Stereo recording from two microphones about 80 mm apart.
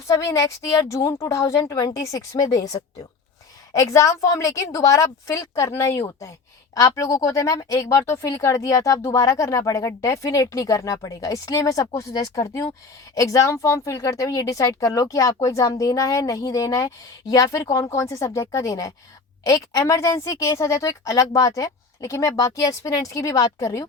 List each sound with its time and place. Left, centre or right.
0.2 s speech: left
3.7 s a woman's voice: left